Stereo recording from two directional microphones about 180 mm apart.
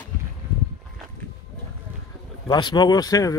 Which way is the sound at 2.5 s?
25° left (ahead or behind).